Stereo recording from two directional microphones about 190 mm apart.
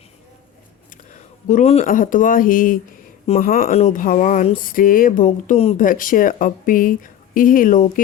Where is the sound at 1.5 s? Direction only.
35° left (ahead or behind).